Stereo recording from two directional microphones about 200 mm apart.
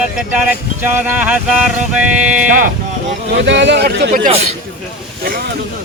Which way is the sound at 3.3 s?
60° right (ahead or behind).